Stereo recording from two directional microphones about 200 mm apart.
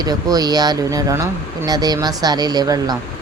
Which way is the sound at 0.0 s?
20° right (ahead or behind).